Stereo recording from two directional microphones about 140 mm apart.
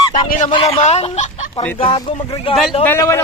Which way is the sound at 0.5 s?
45° left (ahead or behind).